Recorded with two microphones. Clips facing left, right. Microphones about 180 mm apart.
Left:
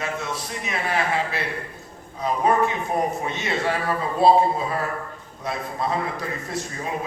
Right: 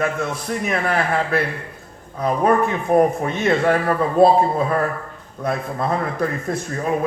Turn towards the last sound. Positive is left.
turn(degrees=-50)  # may be behind; listen again after turning